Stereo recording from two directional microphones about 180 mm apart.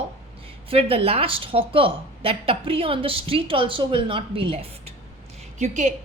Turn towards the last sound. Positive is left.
turn(degrees=-45)  # may be behind; listen again after turning